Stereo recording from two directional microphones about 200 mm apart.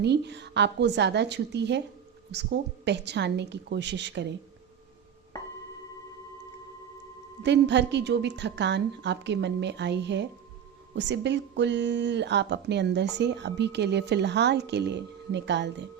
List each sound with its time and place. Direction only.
0.0 s speech: 60° right (ahead or behind)
7.4 s speech: 60° right (ahead or behind)